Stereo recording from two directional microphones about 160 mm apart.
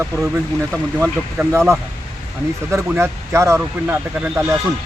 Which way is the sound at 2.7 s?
15° right (ahead or behind).